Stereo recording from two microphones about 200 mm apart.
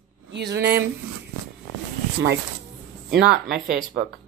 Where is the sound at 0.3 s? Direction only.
60° right (ahead or behind).